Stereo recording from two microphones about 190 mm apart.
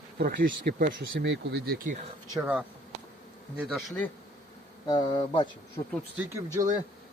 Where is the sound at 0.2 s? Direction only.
50° right (ahead or behind).